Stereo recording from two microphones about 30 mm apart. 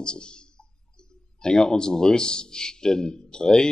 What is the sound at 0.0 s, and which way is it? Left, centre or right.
Speech, left.